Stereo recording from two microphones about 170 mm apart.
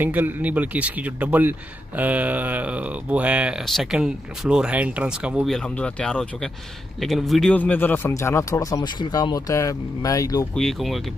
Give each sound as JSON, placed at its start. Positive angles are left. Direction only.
{"t": 0.0, "sound": "speech", "side_deg": -10}
{"t": 10.5, "sound": "speech", "side_deg": 0}